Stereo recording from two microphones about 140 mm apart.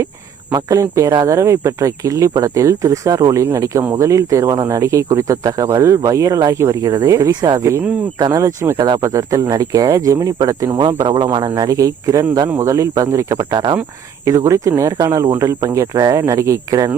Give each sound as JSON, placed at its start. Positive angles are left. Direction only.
{"t": 0.5, "sound": "speech", "side_deg": -25}